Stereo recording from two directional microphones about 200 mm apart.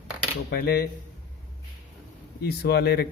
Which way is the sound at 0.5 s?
55° left (ahead or behind).